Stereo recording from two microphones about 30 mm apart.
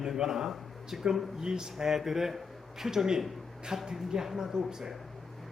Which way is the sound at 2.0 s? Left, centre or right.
Centre.